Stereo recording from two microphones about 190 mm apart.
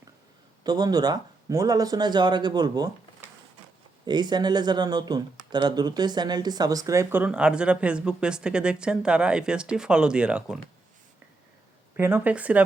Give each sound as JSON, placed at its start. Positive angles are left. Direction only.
{"t": 0.6, "sound": "speech", "side_deg": -20}
{"t": 11.9, "sound": "speech", "side_deg": -10}